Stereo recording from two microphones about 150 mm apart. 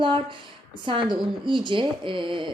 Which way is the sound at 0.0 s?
35° right (ahead or behind).